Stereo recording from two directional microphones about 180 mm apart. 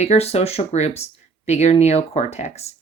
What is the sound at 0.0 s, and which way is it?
Speech, 35° left (ahead or behind).